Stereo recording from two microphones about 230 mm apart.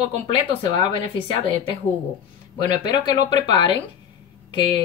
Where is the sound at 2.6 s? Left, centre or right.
Centre.